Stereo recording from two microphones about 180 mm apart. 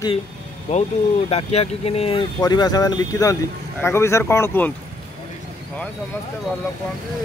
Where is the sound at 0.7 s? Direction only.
40° left (ahead or behind).